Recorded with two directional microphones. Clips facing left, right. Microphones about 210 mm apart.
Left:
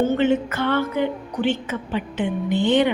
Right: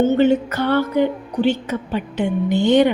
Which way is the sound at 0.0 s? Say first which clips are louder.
Right 4 dB; 30° right (ahead or behind).